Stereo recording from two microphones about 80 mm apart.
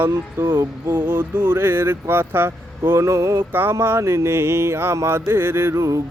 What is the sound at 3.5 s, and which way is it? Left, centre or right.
Speech, right.